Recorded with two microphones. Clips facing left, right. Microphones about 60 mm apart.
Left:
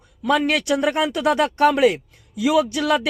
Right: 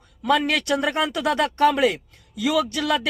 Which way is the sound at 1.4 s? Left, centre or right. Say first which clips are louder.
Left 2 dB; left.